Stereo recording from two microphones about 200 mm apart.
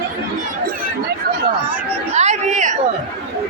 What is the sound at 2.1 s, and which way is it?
Chatter, 35° right (ahead or behind).